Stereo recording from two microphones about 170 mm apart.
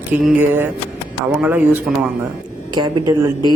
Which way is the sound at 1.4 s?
10° right (ahead or behind).